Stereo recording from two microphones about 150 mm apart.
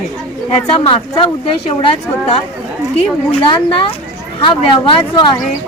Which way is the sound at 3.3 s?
40° left (ahead or behind).